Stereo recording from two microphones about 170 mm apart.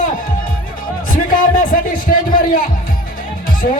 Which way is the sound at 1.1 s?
55° left (ahead or behind).